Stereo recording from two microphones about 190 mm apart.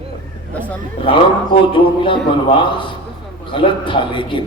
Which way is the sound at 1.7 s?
25° left (ahead or behind).